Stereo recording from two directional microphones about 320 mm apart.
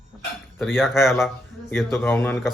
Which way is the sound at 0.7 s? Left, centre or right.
Centre.